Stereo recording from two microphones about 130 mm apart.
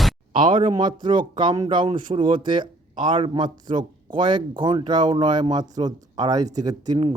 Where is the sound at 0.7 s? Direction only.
35° right (ahead or behind).